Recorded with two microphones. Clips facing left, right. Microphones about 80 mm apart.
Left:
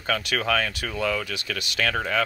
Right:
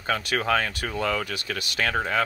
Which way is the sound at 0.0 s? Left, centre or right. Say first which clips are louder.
Even; right.